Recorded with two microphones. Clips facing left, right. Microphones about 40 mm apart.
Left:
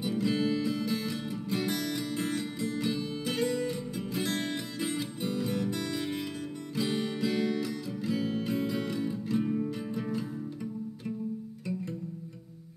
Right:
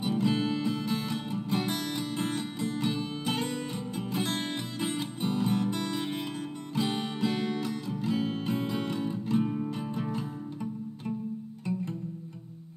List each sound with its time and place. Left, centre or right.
0.0 s music: right